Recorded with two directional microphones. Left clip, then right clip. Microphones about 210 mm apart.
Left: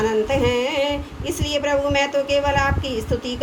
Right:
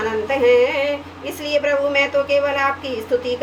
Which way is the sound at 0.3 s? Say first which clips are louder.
Right 5 dB; 50° left (ahead or behind).